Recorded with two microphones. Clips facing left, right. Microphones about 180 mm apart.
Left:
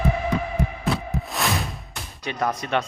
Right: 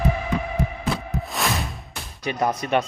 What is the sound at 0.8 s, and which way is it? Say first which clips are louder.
Music: left 1 dB; centre (ahead or behind).